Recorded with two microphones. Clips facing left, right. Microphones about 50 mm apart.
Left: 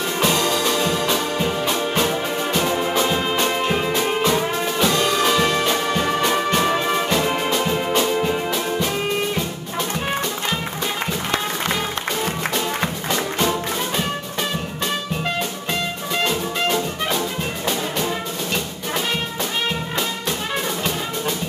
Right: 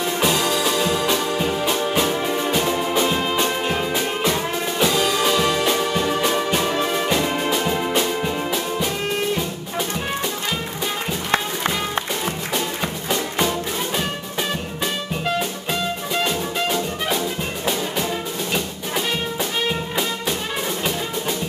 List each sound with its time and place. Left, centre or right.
0.2 s music: centre
6.6 s music: centre
16.3 s music: centre